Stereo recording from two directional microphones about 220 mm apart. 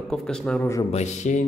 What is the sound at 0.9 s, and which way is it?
Speech, 30° left (ahead or behind).